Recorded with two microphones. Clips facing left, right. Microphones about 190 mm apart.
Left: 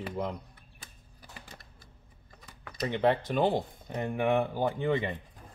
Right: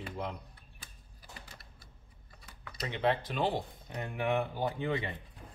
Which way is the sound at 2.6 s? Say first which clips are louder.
Left 5 dB; 50° left (ahead or behind).